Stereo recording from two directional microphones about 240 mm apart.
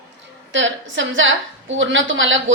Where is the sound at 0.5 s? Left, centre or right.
Right.